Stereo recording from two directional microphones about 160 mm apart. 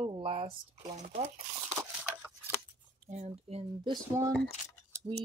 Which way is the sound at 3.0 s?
45° right (ahead or behind).